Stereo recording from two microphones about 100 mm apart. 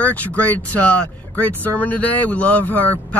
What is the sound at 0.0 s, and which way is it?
Speech, 15° left (ahead or behind).